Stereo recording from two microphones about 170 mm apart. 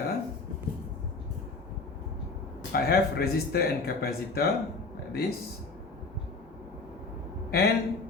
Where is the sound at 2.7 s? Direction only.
65° left (ahead or behind).